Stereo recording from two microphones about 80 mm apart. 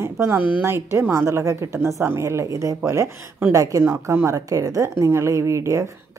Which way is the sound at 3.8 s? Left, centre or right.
Right.